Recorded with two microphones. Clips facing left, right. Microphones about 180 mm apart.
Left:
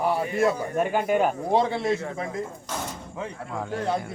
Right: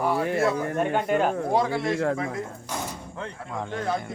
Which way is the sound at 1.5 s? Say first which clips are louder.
Left 1 dB; 25° left (ahead or behind).